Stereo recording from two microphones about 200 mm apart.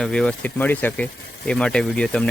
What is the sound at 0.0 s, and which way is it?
Speech, 5° left (ahead or behind).